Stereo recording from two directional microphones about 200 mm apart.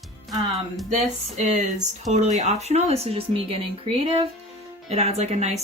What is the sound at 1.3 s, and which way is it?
Speech, 35° right (ahead or behind).